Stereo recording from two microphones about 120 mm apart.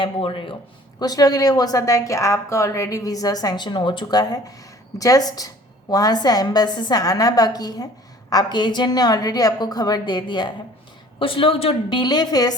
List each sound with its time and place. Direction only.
0.0 s speech: 45° left (ahead or behind)
0.9 s a woman's voice: 35° left (ahead or behind)
11.2 s a woman's voice: 50° left (ahead or behind)